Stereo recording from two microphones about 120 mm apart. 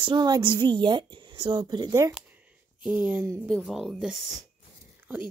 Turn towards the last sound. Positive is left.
turn(degrees=-5)  # may be behind; listen again after turning